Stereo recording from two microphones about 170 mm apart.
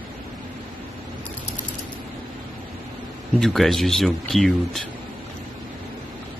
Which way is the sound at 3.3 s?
Centre (ahead or behind).